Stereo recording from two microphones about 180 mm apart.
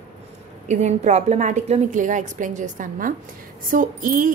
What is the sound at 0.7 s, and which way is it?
A woman's voice, 40° right (ahead or behind).